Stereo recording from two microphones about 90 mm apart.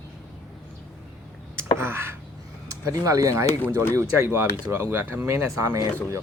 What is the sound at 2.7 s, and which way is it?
Speech, 40° right (ahead or behind).